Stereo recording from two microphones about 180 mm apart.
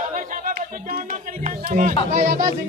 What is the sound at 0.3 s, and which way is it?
Speech, 50° right (ahead or behind).